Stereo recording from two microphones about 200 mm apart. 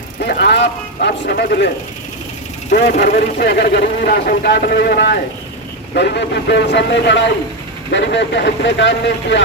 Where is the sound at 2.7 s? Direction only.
50° left (ahead or behind); by 9.4 s 65° left (ahead or behind).